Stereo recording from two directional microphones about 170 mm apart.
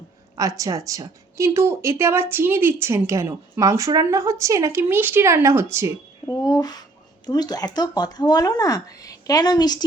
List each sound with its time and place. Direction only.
0.3 s speech: 20° right (ahead or behind)
6.2 s speech: 20° left (ahead or behind)